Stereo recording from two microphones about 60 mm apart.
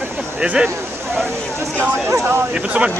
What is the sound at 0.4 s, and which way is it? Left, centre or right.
Speech, centre.